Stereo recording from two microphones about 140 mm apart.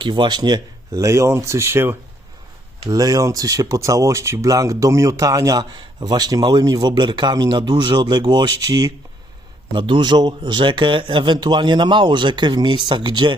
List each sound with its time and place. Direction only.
0.0 s speech: 35° right (ahead or behind)